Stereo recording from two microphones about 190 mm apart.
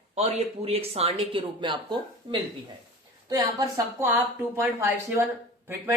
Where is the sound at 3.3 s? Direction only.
20° right (ahead or behind).